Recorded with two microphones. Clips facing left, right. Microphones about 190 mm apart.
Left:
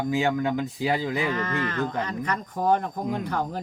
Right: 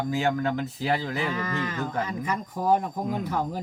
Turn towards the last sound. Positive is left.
turn(degrees=-5)  # may be behind; listen again after turning